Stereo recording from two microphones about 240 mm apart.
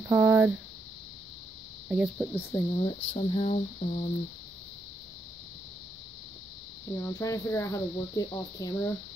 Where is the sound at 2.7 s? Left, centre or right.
Left.